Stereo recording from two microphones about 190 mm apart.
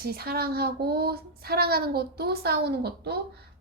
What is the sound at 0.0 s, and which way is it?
Speech, 55° right (ahead or behind).